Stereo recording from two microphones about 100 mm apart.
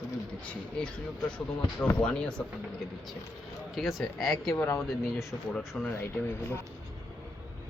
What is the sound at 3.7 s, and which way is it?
Speech, centre (ahead or behind).